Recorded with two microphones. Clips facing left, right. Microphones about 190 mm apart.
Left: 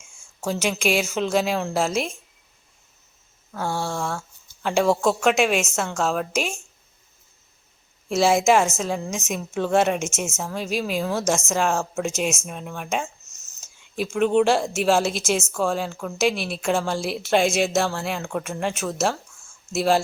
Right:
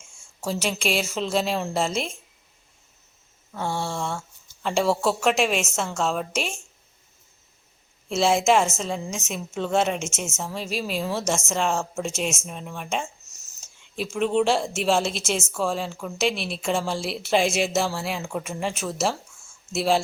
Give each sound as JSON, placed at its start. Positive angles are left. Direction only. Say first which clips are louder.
{"t": 0.4, "sound": "a woman's voice", "louder": "left 3 dB", "side_deg": 0}
{"t": 3.5, "sound": "a woman's voice", "louder": "left 1 dB", "side_deg": 0}
{"t": 8.1, "sound": "a woman's voice", "louder": "left 2 dB", "side_deg": 0}